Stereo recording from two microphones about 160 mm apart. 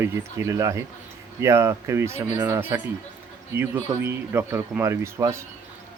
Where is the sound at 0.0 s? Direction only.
20° right (ahead or behind).